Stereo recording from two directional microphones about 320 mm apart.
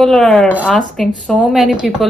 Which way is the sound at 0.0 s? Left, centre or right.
Centre.